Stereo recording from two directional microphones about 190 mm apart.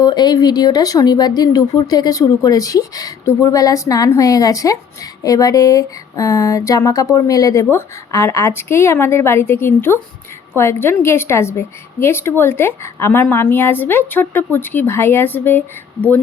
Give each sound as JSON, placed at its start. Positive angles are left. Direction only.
{"t": 0.0, "sound": "speech", "side_deg": 20}